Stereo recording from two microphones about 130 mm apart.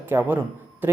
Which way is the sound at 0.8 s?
15° right (ahead or behind).